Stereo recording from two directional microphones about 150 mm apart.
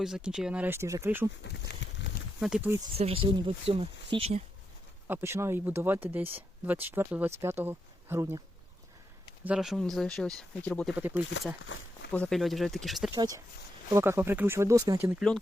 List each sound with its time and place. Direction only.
0.0 s speech: 5° right (ahead or behind)
2.4 s speech: 5° right (ahead or behind)
3.0 s speech: 40° right (ahead or behind)
5.0 s speech: 15° right (ahead or behind)
9.4 s speech: 5° right (ahead or behind)
10.9 s speech: 10° right (ahead or behind)
12.1 s speech: 5° left (ahead or behind)
13.1 s speech: 25° right (ahead or behind)